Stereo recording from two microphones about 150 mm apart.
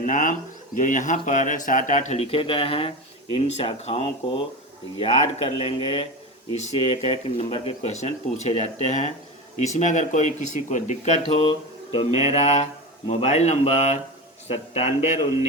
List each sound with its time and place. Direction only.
0.0 s speech: 60° left (ahead or behind)
11.9 s speech: 40° left (ahead or behind)